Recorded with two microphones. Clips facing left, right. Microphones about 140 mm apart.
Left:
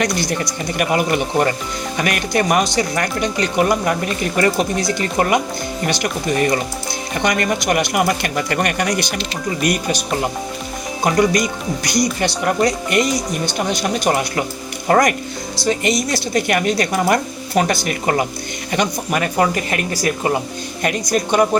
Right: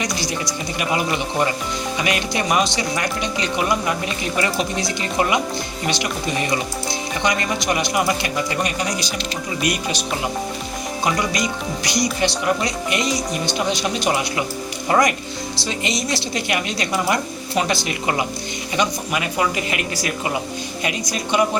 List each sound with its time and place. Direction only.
0.0 s speech: 55° left (ahead or behind)
9.6 s speech: 45° left (ahead or behind)
11.0 s speech: 50° left (ahead or behind)